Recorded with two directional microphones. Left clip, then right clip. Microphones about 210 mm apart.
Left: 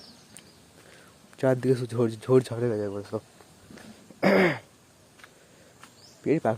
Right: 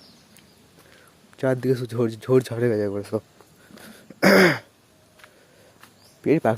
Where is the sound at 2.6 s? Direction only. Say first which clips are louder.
Right 6 dB; 25° right (ahead or behind).